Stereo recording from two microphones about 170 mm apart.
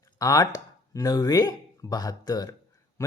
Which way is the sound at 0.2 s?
20° left (ahead or behind).